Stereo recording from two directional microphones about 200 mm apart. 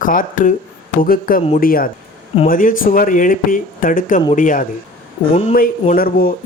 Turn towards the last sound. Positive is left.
turn(degrees=45)  # may be behind; listen again after turning